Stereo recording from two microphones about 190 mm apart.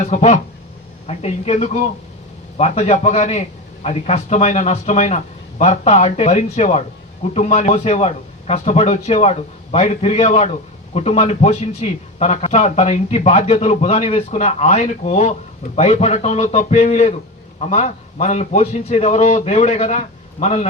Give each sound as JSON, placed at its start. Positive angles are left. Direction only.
{"t": 0.0, "sound": "speech", "side_deg": 35}